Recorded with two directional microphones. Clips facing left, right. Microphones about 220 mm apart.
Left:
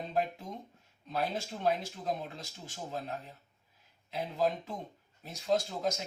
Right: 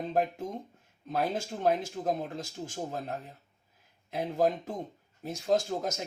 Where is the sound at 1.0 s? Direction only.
50° right (ahead or behind).